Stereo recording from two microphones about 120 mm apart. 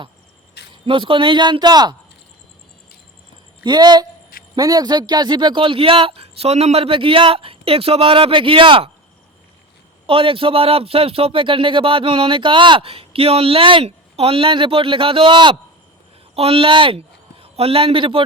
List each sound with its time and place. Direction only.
0.9 s speech: 45° right (ahead or behind)
3.6 s speech: 35° right (ahead or behind)
10.1 s speech: 50° right (ahead or behind)
16.3 s speech: 50° right (ahead or behind)